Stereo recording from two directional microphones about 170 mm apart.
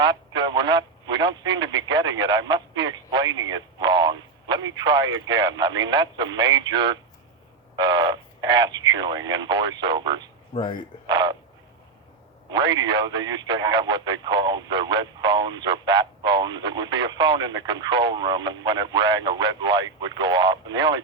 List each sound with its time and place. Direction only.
0.0 s speech: 25° right (ahead or behind)
10.5 s speech: 30° left (ahead or behind)
11.0 s speech: 25° right (ahead or behind)
12.5 s speech: 25° right (ahead or behind)